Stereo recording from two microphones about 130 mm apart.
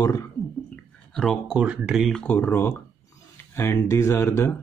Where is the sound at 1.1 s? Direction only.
5° left (ahead or behind).